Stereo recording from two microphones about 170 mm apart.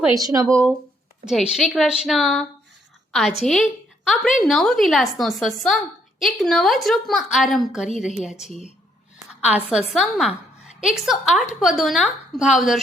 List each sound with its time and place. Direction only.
0.1 s speech: 20° right (ahead or behind)
1.2 s a woman's voice: 5° right (ahead or behind)